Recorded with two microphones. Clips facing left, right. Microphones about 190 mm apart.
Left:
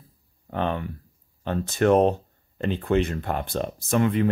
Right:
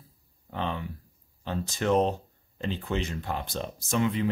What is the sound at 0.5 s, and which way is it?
Speech, 55° left (ahead or behind).